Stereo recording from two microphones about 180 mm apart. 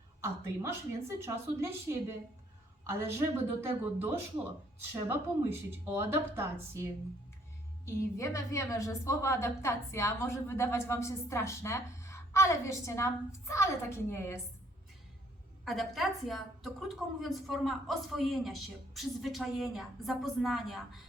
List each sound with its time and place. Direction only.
0.2 s speech: 15° right (ahead or behind)
4.8 s speech: 15° right (ahead or behind)
8.2 s a woman's voice: 15° left (ahead or behind)
15.6 s a man's voice: centre (ahead or behind)